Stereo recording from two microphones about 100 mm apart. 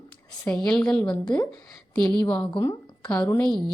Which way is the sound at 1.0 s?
50° left (ahead or behind).